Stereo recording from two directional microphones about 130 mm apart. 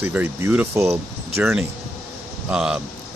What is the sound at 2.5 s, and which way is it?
Speech, 5° right (ahead or behind).